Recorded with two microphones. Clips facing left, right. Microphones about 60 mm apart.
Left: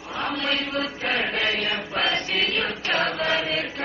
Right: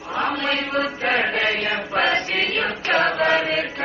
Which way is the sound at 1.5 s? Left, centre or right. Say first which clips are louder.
Right 3 dB; right.